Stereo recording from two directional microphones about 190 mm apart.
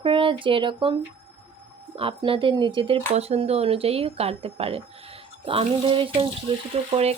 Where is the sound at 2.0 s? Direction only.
30° right (ahead or behind).